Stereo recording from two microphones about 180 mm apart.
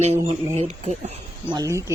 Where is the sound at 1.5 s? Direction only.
20° right (ahead or behind).